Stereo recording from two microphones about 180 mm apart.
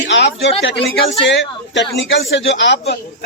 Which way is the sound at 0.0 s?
80° left.